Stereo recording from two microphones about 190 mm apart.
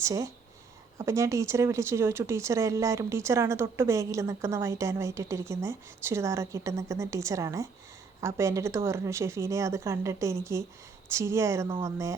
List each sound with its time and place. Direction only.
0.0 s speech: 15° right (ahead or behind)